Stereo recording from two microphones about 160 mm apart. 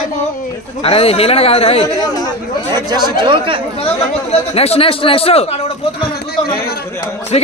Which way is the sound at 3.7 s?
40° left (ahead or behind).